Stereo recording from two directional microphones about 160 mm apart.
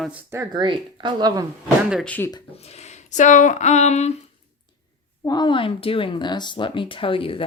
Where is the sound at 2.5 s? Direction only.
40° left (ahead or behind).